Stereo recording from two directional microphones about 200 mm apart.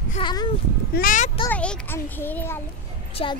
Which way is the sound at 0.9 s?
45° left (ahead or behind).